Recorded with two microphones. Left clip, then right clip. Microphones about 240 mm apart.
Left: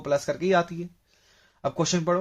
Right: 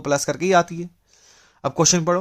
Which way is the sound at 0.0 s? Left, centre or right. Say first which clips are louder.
Right 4 dB; right.